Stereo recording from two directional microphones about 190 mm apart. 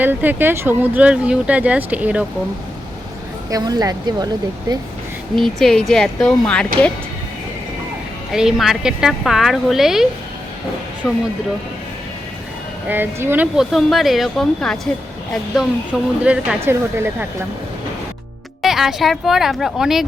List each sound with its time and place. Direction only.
0.0 s speech: 10° right (ahead or behind)
3.5 s speech: 20° right (ahead or behind)
5.4 s speech: centre (ahead or behind)
8.3 s speech: centre (ahead or behind)
12.9 s speech: 10° right (ahead or behind)
18.6 s speech: centre (ahead or behind)